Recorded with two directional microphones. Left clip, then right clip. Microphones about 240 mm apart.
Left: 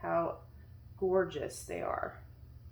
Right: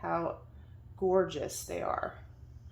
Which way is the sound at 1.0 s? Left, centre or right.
Right.